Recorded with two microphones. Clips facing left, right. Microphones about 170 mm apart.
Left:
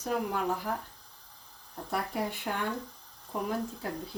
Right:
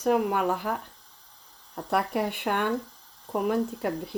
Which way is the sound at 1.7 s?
65° right (ahead or behind).